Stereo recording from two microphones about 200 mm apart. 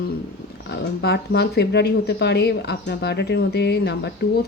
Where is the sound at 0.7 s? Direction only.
55° left (ahead or behind).